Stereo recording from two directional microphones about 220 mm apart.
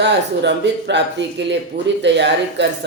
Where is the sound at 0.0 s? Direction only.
50° right (ahead or behind).